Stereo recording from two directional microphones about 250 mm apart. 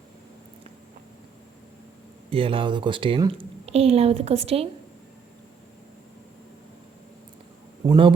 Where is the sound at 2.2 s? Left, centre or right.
Right.